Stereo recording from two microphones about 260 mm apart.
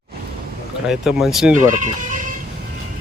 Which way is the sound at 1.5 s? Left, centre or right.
Right.